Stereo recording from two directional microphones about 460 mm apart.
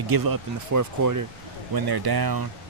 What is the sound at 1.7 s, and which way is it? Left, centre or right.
Speech, right.